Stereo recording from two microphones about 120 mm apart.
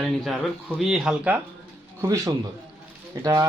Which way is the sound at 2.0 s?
30° right (ahead or behind).